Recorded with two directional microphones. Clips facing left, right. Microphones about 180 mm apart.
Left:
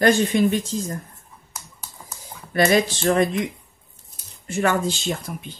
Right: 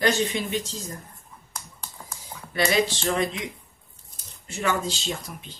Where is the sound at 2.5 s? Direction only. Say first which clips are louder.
Left 5 dB; 55° left (ahead or behind).